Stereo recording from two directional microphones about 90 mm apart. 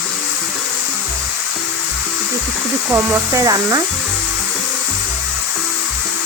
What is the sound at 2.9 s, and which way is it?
Speech, 35° right (ahead or behind).